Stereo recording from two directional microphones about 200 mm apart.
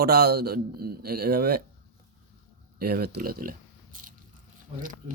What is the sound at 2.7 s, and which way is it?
Speech, 50° right (ahead or behind).